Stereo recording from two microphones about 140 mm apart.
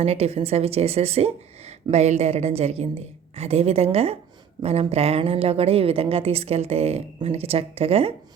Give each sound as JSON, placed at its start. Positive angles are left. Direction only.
{"t": 0.0, "sound": "speech", "side_deg": -50}